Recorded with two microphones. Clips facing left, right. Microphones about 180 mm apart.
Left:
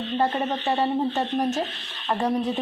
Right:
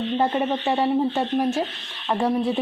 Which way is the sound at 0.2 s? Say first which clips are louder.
Right 1 dB; 15° right (ahead or behind).